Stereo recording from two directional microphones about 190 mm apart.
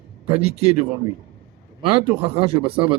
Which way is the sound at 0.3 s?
35° right (ahead or behind).